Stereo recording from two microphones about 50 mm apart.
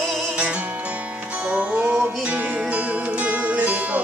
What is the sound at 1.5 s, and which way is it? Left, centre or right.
Music, right.